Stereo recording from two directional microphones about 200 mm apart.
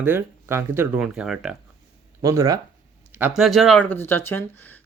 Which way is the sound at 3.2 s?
Centre (ahead or behind).